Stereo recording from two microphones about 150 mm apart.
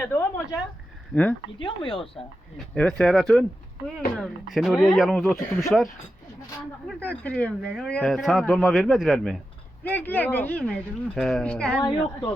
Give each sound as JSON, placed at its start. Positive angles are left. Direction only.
{"t": 0.0, "sound": "a sound", "side_deg": 10}
{"t": 1.1, "sound": "speech", "side_deg": 10}
{"t": 1.5, "sound": "speech", "side_deg": 35}
{"t": 2.7, "sound": "speech", "side_deg": 5}
{"t": 7.0, "sound": "speech", "side_deg": 10}
{"t": 9.8, "sound": "speech", "side_deg": 10}